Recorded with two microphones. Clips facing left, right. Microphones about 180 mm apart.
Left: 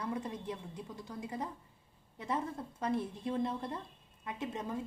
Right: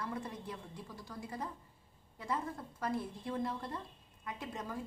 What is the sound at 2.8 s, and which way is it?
A woman's voice, 20° left (ahead or behind).